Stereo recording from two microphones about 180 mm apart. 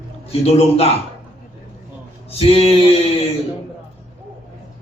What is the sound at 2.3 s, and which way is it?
Speech, 35° left (ahead or behind).